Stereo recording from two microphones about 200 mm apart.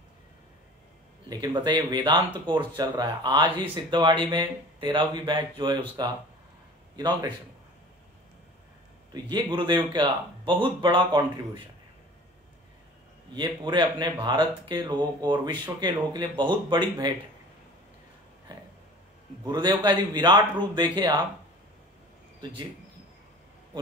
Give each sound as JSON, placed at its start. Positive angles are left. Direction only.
{"t": 1.3, "sound": "speech", "side_deg": -20}
{"t": 9.1, "sound": "speech", "side_deg": -20}
{"t": 13.3, "sound": "speech", "side_deg": -20}
{"t": 19.4, "sound": "speech", "side_deg": -20}